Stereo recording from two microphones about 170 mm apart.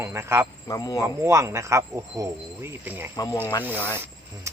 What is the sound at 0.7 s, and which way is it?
Speech, 20° left (ahead or behind).